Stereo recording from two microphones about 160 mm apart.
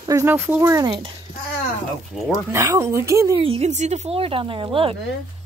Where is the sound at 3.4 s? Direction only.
40° right (ahead or behind).